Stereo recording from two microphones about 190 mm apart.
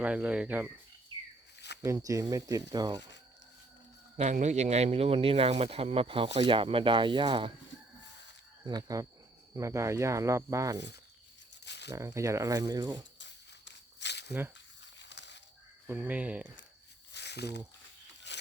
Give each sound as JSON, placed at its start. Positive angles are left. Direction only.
{"t": 0.0, "sound": "speech", "side_deg": -5}
{"t": 1.8, "sound": "speech", "side_deg": -15}
{"t": 4.2, "sound": "speech", "side_deg": -40}
{"t": 8.6, "sound": "speech", "side_deg": -20}
{"t": 10.8, "sound": "speech", "side_deg": 65}
{"t": 11.6, "sound": "rattle", "side_deg": 65}
{"t": 11.9, "sound": "speech", "side_deg": -15}
{"t": 13.1, "sound": "a sound", "side_deg": 65}
{"t": 15.9, "sound": "speech", "side_deg": -10}
{"t": 17.1, "sound": "a sound", "side_deg": 65}
{"t": 18.3, "sound": "rub", "side_deg": 65}